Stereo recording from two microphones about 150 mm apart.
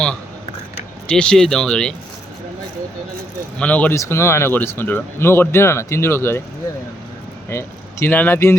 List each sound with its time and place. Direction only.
1.0 s speech: 5° left (ahead or behind)
3.6 s speech: 10° left (ahead or behind)
7.5 s speech: 15° left (ahead or behind)